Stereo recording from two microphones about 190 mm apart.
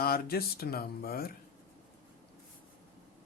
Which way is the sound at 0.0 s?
55° left (ahead or behind).